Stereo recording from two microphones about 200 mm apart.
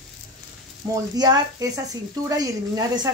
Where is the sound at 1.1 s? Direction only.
20° right (ahead or behind).